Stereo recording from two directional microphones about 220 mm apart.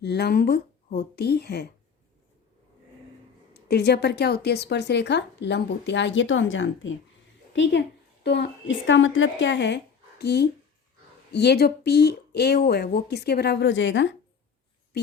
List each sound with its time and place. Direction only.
0.0 s a woman's voice: 50° left (ahead or behind)
3.5 s a woman's voice: 50° left (ahead or behind)